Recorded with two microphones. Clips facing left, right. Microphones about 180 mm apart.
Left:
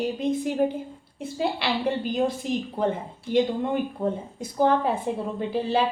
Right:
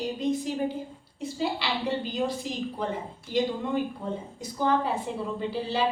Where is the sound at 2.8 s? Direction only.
50° left (ahead or behind).